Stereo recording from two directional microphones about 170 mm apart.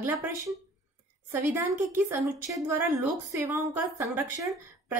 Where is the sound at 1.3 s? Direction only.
10° right (ahead or behind).